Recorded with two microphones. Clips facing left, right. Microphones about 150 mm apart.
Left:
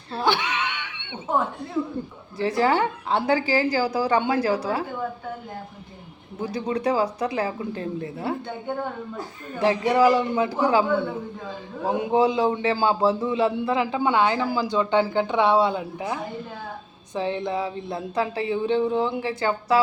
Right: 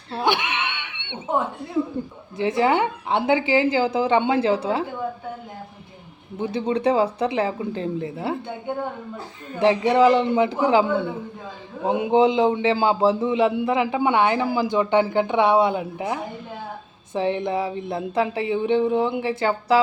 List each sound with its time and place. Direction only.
0.1 s laughter: 20° right (ahead or behind)
2.4 s a man's voice: 20° right (ahead or behind)
6.4 s a man's voice: 30° right (ahead or behind)
11.8 s a man's voice: 20° right (ahead or behind)